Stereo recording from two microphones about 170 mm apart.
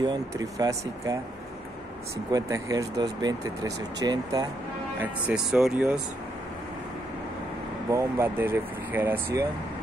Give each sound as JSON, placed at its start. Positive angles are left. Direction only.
{"t": 0.0, "sound": "speech", "side_deg": -25}
{"t": 2.3, "sound": "speech", "side_deg": -20}
{"t": 5.0, "sound": "speech", "side_deg": -5}
{"t": 7.9, "sound": "speech", "side_deg": -15}